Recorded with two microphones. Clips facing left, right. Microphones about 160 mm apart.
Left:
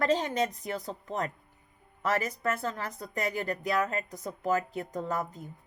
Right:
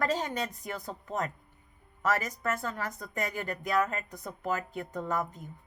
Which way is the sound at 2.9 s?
40° left (ahead or behind).